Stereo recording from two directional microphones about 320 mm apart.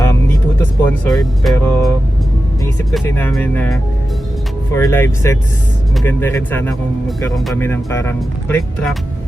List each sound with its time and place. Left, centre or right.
0.6 s speech: centre
2.9 s speech: centre